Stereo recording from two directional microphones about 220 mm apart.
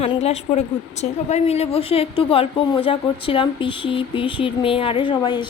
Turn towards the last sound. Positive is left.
turn(degrees=20)  # may be behind; listen again after turning